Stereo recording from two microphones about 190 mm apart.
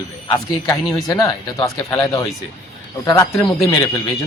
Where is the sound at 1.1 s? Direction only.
15° left (ahead or behind).